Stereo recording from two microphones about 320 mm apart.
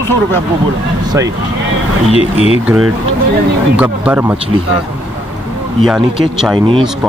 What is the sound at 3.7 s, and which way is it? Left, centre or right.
Speech, centre.